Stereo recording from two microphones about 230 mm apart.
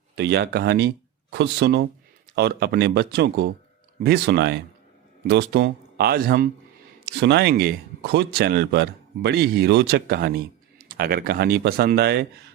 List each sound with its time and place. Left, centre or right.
0.2 s speech: right